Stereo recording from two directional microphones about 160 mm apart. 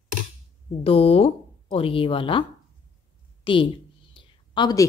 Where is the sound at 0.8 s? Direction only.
35° left (ahead or behind).